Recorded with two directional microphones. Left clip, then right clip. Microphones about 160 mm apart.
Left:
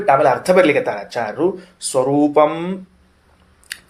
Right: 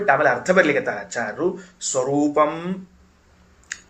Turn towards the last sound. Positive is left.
turn(degrees=35)  # may be behind; listen again after turning